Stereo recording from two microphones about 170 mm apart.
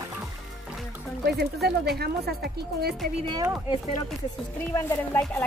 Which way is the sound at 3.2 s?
25° right (ahead or behind).